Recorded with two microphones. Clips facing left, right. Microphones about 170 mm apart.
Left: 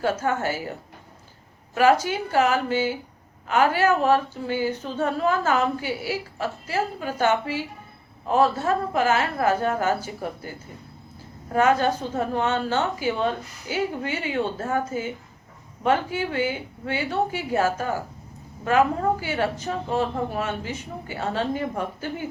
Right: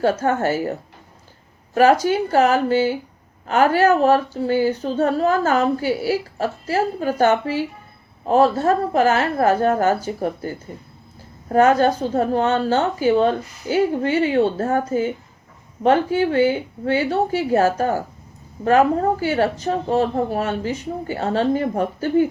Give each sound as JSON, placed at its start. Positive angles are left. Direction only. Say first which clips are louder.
{"t": 0.0, "sound": "speech", "louder": "right 5 dB", "side_deg": -40}
{"t": 1.7, "sound": "speech", "louder": "right 4 dB", "side_deg": -40}